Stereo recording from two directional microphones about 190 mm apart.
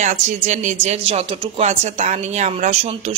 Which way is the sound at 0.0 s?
40° right (ahead or behind).